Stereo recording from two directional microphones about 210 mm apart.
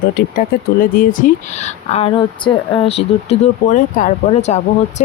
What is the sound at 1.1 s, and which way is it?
Speech, 35° left (ahead or behind).